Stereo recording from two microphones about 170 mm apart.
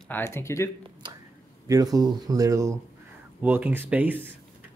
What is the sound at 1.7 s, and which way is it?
Speech, 20° right (ahead or behind).